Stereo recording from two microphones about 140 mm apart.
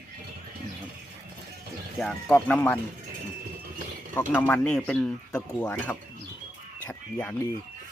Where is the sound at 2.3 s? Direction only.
10° left (ahead or behind).